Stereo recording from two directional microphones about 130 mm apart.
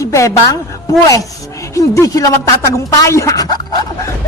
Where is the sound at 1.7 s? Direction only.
25° left (ahead or behind).